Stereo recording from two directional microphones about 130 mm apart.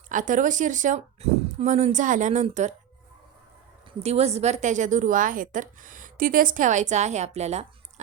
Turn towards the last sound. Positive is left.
turn(degrees=-55)  # may be behind; listen again after turning